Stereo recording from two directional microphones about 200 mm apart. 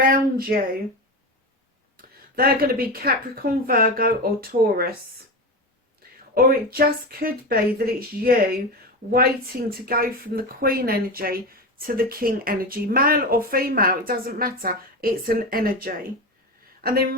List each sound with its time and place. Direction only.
0.0 s speech: 45° right (ahead or behind)
2.0 s speech: 50° right (ahead or behind)
6.3 s speech: 45° right (ahead or behind)
9.6 s speech: 50° right (ahead or behind)